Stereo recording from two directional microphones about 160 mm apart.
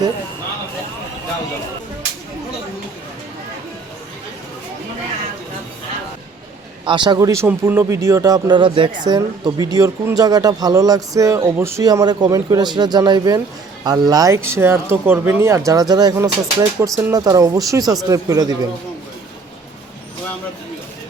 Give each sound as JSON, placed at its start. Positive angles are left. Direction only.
{"t": 6.8, "sound": "speech", "side_deg": -30}